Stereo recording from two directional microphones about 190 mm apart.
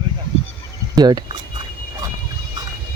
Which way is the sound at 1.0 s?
20° right (ahead or behind).